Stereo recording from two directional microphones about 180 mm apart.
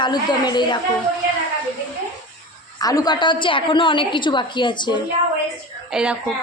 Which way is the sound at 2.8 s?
20° left (ahead or behind).